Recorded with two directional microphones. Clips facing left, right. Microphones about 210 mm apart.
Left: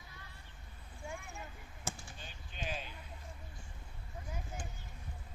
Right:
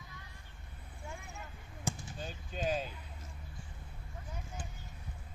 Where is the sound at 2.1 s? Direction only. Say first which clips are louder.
Right 8 dB; 40° right (ahead or behind).